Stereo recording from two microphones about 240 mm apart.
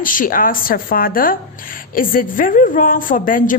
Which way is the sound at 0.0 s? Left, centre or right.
Left.